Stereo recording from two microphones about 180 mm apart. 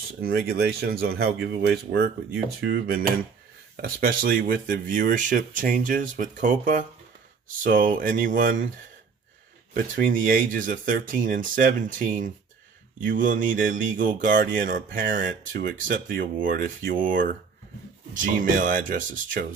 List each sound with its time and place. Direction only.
0.2 s speech: 60° right (ahead or behind)
9.8 s speech: 50° right (ahead or behind)